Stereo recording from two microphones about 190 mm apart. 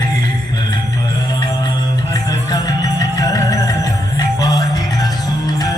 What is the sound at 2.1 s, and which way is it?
Music, 20° left (ahead or behind).